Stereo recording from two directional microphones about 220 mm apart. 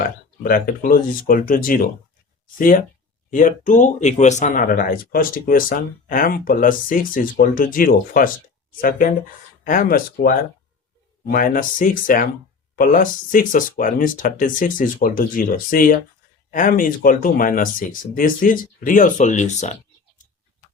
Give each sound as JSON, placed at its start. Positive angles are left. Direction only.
{"t": 0.4, "sound": "speech", "side_deg": 40}